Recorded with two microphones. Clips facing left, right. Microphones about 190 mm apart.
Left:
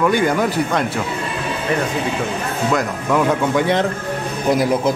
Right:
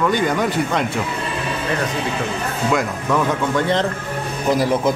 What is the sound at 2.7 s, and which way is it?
Speech, centre (ahead or behind).